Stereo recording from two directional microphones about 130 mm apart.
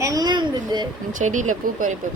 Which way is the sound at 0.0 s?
30° right (ahead or behind).